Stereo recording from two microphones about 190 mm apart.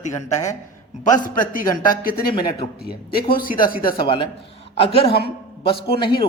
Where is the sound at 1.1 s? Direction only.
45° left (ahead or behind).